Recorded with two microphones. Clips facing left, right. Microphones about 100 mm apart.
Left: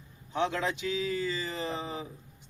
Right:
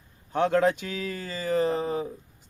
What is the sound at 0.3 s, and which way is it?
Speech, 50° right (ahead or behind).